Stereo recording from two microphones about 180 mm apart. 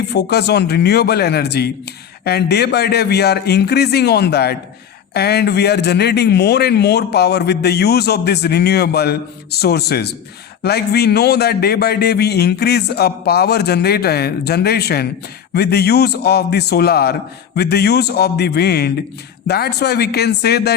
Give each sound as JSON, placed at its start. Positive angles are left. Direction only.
{"t": 0.1, "sound": "speech", "side_deg": 65}